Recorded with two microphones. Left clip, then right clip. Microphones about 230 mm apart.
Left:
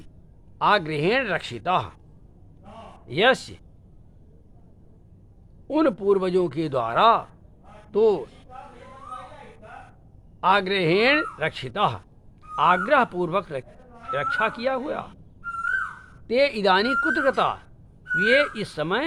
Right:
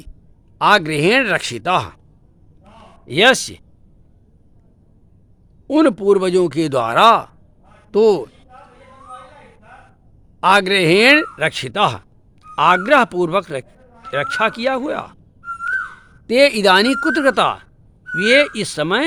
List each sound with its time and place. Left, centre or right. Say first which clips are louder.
0.6 s speech: right 7 dB; right
3.1 s speech: right 7 dB; right
5.6 s speech: right 7 dB; right
10.4 s speech: right 7 dB; right
16.2 s speech: right 8 dB; right